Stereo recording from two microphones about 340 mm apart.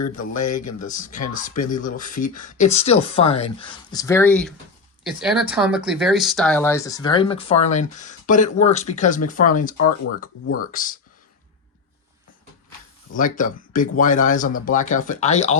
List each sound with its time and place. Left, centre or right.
0.2 s speech: left
0.9 s speech: left
13.1 s speech: left